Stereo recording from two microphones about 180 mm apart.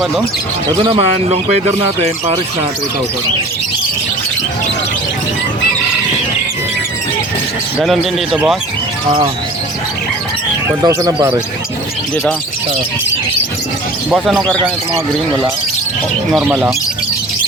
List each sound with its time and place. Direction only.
0.7 s speech: 25° right (ahead or behind)
7.8 s speech: centre (ahead or behind)
10.7 s speech: 15° right (ahead or behind)
14.1 s speech: centre (ahead or behind)
16.3 s speech: 5° right (ahead or behind)